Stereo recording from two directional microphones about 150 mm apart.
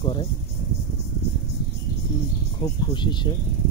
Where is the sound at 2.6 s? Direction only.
30° left (ahead or behind).